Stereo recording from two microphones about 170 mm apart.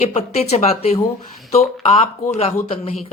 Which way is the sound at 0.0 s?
40° left (ahead or behind).